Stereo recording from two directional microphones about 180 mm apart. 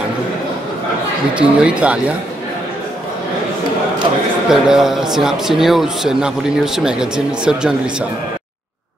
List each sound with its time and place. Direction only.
1.3 s speech: 5° right (ahead or behind)
4.5 s a man's voice: 5° right (ahead or behind)